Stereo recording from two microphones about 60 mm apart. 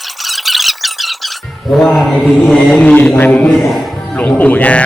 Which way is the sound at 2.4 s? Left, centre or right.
Centre.